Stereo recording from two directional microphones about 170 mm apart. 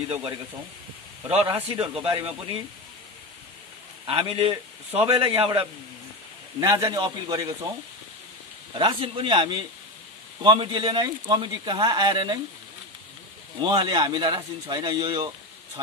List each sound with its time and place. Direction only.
1.3 s speech: 35° right (ahead or behind)
4.0 s speech: 30° right (ahead or behind)
6.6 s speech: 20° right (ahead or behind)
8.7 s speech: 30° right (ahead or behind)
13.6 s speech: 25° right (ahead or behind)